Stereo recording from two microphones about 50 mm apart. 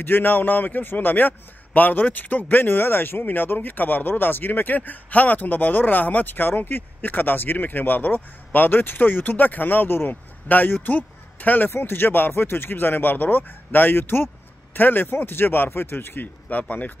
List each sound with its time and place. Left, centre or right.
0.0 s a man's voice: left
11.7 s speech: left
16.4 s a man's voice: left